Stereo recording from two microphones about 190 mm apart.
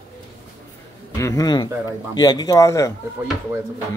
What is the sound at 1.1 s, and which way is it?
Speech, 15° left (ahead or behind).